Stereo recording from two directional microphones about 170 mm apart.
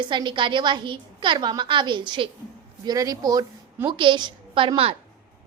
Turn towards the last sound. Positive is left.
turn(degrees=-30)  # may be behind; listen again after turning